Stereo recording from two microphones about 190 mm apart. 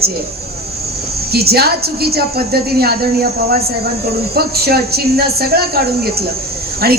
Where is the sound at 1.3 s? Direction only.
55° right (ahead or behind).